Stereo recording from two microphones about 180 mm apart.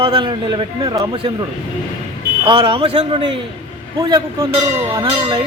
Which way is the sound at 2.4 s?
30° right (ahead or behind).